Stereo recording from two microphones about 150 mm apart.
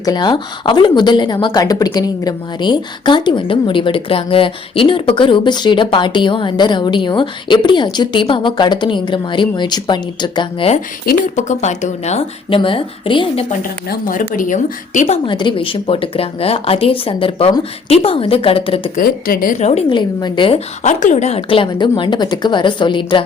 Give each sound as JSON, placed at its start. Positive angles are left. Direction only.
{"t": 0.0, "sound": "a woman's voice", "side_deg": 30}
{"t": 11.3, "sound": "speech", "side_deg": 50}
{"t": 13.5, "sound": "speech", "side_deg": 65}
{"t": 15.0, "sound": "a woman's voice", "side_deg": 35}
{"t": 18.9, "sound": "speech", "side_deg": 75}
{"t": 19.9, "sound": "a woman's voice", "side_deg": 30}
{"t": 20.8, "sound": "a woman's voice", "side_deg": 55}